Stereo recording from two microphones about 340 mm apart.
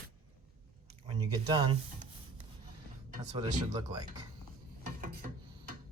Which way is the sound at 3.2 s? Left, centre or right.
Centre.